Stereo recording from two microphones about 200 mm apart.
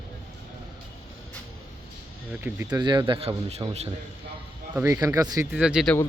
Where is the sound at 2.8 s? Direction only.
20° right (ahead or behind).